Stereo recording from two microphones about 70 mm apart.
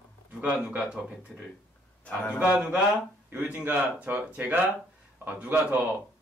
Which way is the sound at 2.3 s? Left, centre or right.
Right.